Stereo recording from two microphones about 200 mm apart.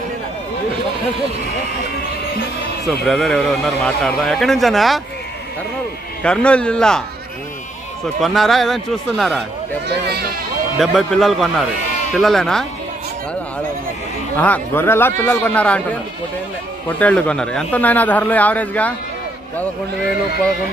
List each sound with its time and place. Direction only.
2.9 s a man's voice: centre (ahead or behind)
6.2 s a man's voice: 5° left (ahead or behind)
8.2 s a man's voice: centre (ahead or behind)
9.8 s speech: 55° right (ahead or behind)
10.8 s a man's voice: centre (ahead or behind)
14.3 s a man's voice: 10° left (ahead or behind)
17.0 s a man's voice: 5° left (ahead or behind)